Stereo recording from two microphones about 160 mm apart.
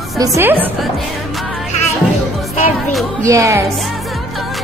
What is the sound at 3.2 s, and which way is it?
Speech, 20° right (ahead or behind).